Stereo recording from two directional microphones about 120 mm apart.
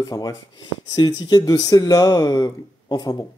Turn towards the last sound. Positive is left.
turn(degrees=35)  # may be behind; listen again after turning